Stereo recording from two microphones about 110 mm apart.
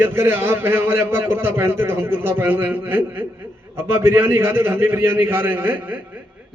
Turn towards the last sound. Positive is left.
turn(degrees=-20)  # may be behind; listen again after turning